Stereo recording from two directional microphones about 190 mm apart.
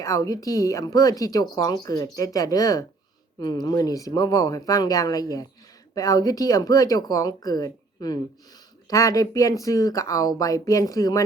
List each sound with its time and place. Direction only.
0.0 s speech: 15° left (ahead or behind)